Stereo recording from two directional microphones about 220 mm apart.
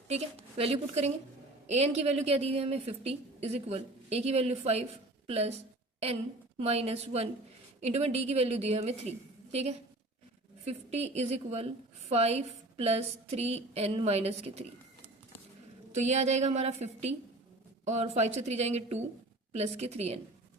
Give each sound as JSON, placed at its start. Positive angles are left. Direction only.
{"t": 0.1, "sound": "a woman's voice", "side_deg": -30}
{"t": 6.6, "sound": "a woman's voice", "side_deg": -30}
{"t": 15.9, "sound": "a woman's voice", "side_deg": -30}